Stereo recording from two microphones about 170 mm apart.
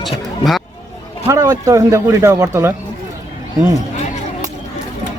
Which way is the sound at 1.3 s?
20° right (ahead or behind).